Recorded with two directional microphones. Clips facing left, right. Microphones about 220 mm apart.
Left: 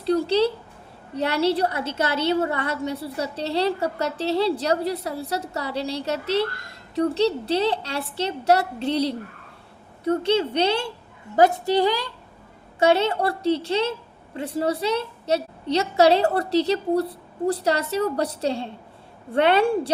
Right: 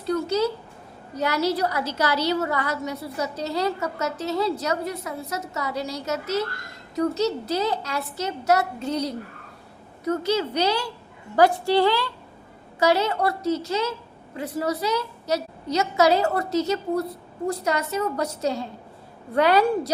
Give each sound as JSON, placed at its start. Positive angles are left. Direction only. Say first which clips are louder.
{"t": 0.0, "sound": "a woman's voice", "louder": "left 3 dB", "side_deg": 30}